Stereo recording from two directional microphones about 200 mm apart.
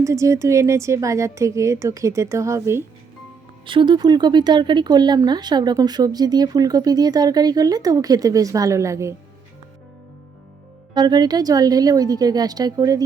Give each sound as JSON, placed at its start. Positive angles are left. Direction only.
{"t": 0.0, "sound": "a woman's voice", "side_deg": -15}
{"t": 3.7, "sound": "speech", "side_deg": -25}
{"t": 10.9, "sound": "speech", "side_deg": -20}